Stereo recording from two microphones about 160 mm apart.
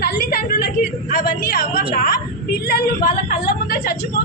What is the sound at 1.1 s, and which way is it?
Speech, 70° left (ahead or behind).